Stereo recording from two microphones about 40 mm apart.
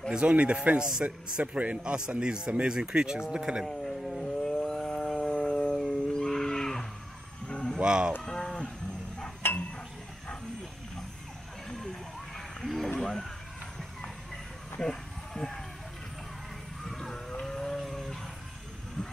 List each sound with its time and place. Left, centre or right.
0.1 s a man's voice: right
1.8 s speech: right
3.8 s dog: centre
4.4 s howl: left
6.1 s music: centre
7.4 s vehicle: left
7.8 s speech: right
8.2 s cattle: centre
9.4 s a sound: left
11.7 s a sound: centre
13.0 s music: centre
14.8 s a sound: centre
16.8 s a sound: centre